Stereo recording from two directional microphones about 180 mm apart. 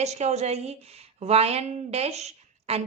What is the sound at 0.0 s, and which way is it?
A woman's voice, 40° right (ahead or behind).